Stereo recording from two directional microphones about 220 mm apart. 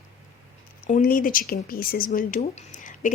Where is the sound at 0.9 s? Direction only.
35° left (ahead or behind).